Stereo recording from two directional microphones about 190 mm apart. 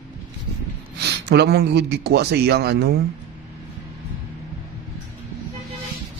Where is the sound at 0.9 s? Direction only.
60° right (ahead or behind).